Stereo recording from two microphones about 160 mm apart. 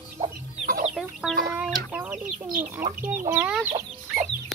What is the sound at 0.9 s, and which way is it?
Chicken, 5° right (ahead or behind).